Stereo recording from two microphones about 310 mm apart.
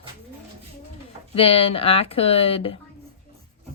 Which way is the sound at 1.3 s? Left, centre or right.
Centre.